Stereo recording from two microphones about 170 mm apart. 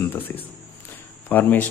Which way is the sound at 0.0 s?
10° left (ahead or behind).